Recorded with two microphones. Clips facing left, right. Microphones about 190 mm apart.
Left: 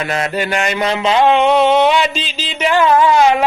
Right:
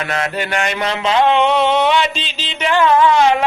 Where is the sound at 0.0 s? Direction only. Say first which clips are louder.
Left 2 dB; 35° left (ahead or behind).